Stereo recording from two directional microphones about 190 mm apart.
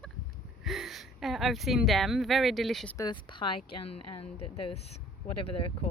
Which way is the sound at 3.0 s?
25° left (ahead or behind).